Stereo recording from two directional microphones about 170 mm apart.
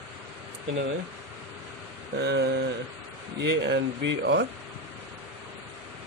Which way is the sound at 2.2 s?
85° right.